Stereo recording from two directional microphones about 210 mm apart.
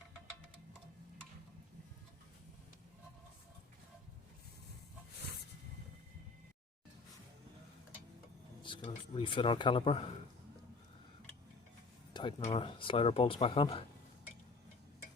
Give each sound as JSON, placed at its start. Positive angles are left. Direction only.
{"t": 8.6, "sound": "speech", "side_deg": 25}
{"t": 12.1, "sound": "speech", "side_deg": 25}